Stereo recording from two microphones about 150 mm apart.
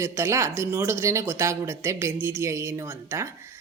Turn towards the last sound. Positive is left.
turn(degrees=-20)  # may be behind; listen again after turning